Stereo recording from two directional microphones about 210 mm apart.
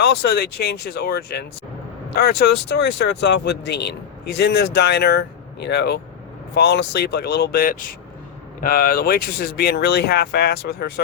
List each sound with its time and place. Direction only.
0.0 s speech: 50° left (ahead or behind)